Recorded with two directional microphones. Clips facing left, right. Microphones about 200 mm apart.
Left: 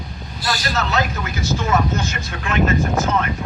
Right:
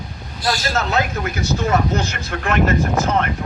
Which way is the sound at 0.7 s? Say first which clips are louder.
Right 1 dB; 50° right (ahead or behind).